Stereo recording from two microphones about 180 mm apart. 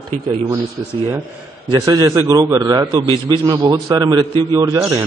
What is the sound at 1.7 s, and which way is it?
A man's voice, 20° right (ahead or behind).